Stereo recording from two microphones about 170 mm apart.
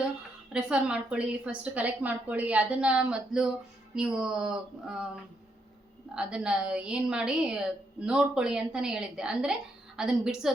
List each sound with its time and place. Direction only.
0.5 s a woman's voice: 5° right (ahead or behind)
6.1 s a woman's voice: 5° right (ahead or behind)